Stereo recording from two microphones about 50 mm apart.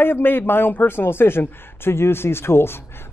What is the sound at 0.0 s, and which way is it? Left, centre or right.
A man's voice, left.